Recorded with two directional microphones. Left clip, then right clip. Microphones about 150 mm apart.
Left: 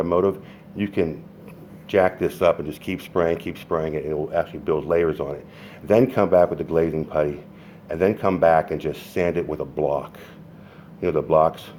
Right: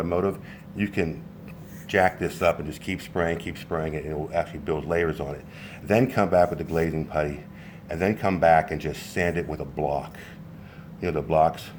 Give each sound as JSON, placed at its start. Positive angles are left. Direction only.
{"t": 0.0, "sound": "speech", "side_deg": 50}